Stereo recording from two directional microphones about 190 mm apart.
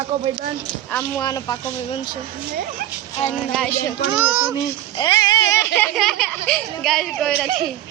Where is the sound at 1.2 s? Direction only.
20° left (ahead or behind).